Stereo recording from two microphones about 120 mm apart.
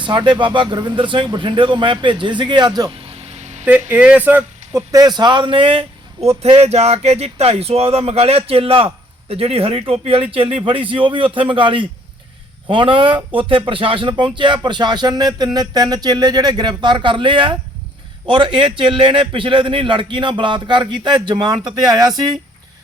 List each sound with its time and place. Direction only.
0.0 s speech: 40° right (ahead or behind)
3.7 s speech: 15° right (ahead or behind)
4.7 s a man's voice: 30° right (ahead or behind)